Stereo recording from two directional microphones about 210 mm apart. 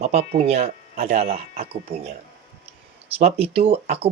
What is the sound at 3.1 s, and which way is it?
Speech, 30° right (ahead or behind).